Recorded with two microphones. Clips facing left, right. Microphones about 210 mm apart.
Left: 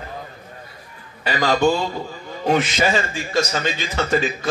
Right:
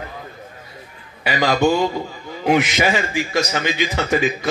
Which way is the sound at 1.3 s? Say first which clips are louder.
Right 1 dB; 15° right (ahead or behind).